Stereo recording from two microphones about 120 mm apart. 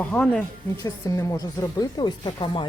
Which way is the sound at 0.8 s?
25° left (ahead or behind).